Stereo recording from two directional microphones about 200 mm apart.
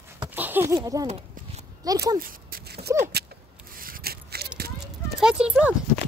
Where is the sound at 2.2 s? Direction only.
45° right (ahead or behind).